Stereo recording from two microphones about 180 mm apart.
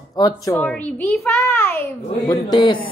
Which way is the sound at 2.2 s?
25° left (ahead or behind).